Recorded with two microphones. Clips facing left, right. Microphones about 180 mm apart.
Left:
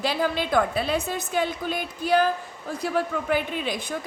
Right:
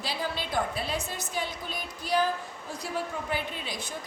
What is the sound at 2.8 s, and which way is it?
A woman's voice, 75° left (ahead or behind).